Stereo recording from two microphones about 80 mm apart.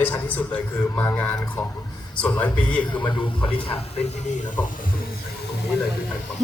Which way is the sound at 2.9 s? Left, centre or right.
Left.